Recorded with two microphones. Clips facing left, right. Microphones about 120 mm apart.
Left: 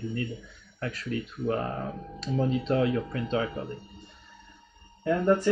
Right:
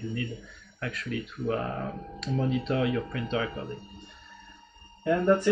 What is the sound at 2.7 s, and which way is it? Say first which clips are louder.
Speech: left 3 dB; 35° left (ahead or behind).